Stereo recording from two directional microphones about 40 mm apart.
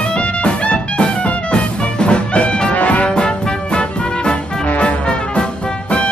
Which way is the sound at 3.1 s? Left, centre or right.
Left.